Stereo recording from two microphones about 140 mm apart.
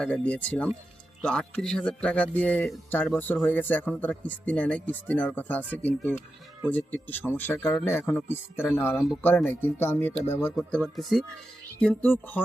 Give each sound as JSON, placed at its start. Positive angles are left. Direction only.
{"t": 0.0, "sound": "speech", "side_deg": 10}